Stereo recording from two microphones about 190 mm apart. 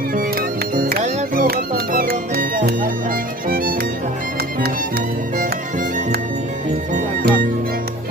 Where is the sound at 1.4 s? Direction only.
50° right (ahead or behind).